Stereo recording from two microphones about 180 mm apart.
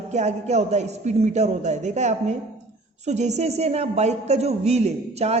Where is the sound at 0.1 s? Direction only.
40° right (ahead or behind).